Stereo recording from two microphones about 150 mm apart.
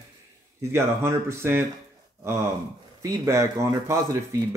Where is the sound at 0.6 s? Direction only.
15° right (ahead or behind).